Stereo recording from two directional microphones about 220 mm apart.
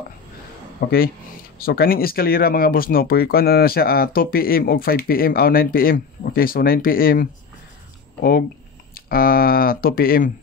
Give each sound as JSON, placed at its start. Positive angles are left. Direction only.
{"t": 0.7, "sound": "speech", "side_deg": 45}